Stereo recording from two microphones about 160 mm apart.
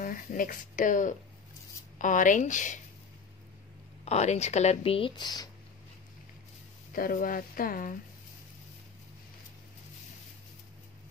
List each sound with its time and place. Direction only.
0.0 s speech: 60° left (ahead or behind)
4.0 s speech: 45° left (ahead or behind); by 5.5 s 25° left (ahead or behind)
6.9 s speech: 60° left (ahead or behind)